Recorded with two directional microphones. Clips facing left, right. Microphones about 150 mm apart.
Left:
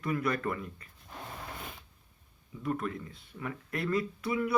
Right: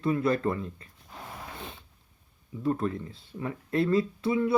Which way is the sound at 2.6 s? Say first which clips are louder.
Right 5 dB; 30° right (ahead or behind).